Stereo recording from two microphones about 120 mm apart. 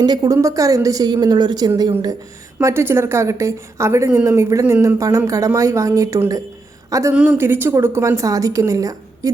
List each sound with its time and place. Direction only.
0.0 s a woman's voice: 35° right (ahead or behind)
2.6 s a woman's voice: 20° right (ahead or behind)